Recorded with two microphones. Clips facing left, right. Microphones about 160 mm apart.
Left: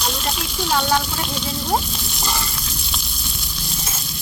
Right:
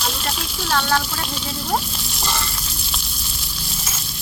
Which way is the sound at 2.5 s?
Centre (ahead or behind).